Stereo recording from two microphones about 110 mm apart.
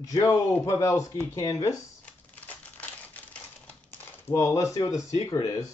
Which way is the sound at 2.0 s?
15° left (ahead or behind).